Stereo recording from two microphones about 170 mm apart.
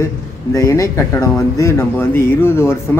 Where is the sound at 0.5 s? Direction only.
20° left (ahead or behind).